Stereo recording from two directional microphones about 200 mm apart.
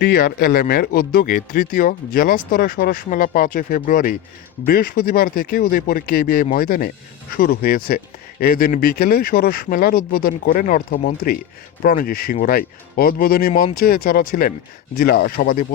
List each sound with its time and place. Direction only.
0.0 s speech: 50° left (ahead or behind)
13.5 s speech: 35° left (ahead or behind)
13.7 s speech: 45° left (ahead or behind)